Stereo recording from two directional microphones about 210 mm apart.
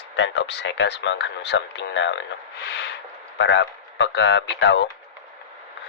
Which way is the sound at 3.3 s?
60° left (ahead or behind).